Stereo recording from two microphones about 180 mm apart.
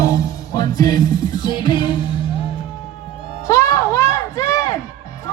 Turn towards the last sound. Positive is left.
turn(degrees=20)  # may be behind; listen again after turning